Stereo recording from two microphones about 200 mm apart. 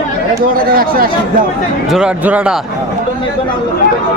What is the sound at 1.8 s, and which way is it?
Speech, 5° right (ahead or behind).